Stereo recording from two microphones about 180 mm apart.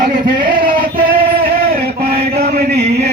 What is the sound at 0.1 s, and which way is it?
Male singing, 25° right (ahead or behind).